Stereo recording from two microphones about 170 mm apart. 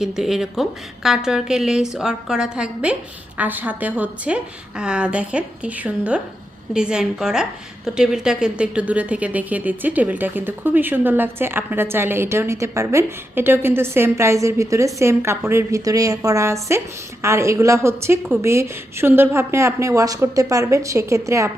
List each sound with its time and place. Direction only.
0.0 s a woman's voice: centre (ahead or behind); by 21.5 s 15° right (ahead or behind)